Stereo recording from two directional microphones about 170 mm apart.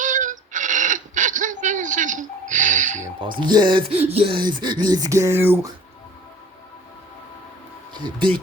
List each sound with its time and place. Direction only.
0.0 s a sound: 50° right (ahead or behind)
3.2 s speech: 30° right (ahead or behind)
7.9 s speech: 25° right (ahead or behind)